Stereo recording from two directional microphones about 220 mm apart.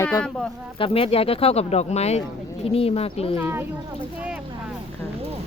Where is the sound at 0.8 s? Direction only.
25° left (ahead or behind).